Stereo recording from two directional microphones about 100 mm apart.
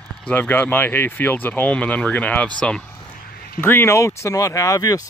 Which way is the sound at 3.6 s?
20° left (ahead or behind).